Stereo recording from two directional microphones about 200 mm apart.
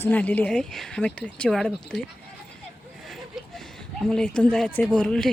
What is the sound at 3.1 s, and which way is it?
Speech, centre (ahead or behind).